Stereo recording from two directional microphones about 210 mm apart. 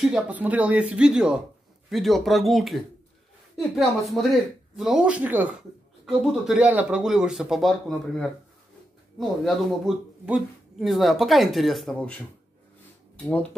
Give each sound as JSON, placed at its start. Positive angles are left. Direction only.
{"t": 0.0, "sound": "speech", "side_deg": -5}
{"t": 9.4, "sound": "speech", "side_deg": 0}
{"t": 13.2, "sound": "speech", "side_deg": 5}